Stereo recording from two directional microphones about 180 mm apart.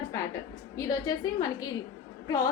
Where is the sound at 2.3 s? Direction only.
20° left (ahead or behind).